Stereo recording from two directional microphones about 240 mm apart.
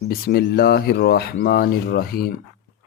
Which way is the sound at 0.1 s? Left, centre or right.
Left.